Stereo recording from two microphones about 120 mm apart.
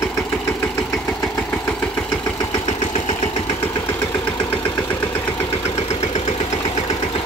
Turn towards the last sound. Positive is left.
turn(degrees=65)  # may be behind; listen again after turning